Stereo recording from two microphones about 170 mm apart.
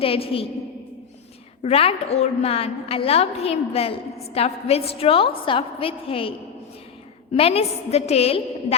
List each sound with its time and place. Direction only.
0.0 s a woman's voice: 35° left (ahead or behind)
1.6 s a woman's voice: 35° left (ahead or behind)
7.3 s a woman's voice: 35° left (ahead or behind)